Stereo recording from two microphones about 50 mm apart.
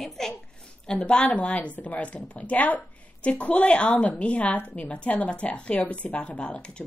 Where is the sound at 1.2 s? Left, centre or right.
Left.